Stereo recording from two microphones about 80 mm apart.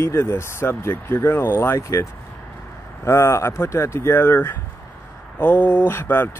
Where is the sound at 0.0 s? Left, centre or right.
Left.